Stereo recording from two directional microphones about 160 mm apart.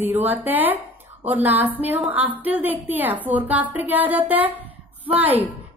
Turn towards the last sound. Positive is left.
turn(degrees=-10)  # may be behind; listen again after turning